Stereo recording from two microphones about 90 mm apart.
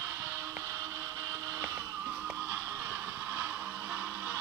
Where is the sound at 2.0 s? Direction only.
15° right (ahead or behind).